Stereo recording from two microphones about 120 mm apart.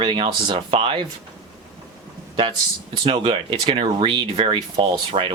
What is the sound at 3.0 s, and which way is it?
Speech, 45° right (ahead or behind).